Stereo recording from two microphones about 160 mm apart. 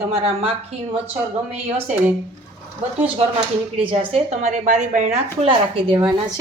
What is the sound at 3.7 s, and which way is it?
A woman's voice, 35° right (ahead or behind).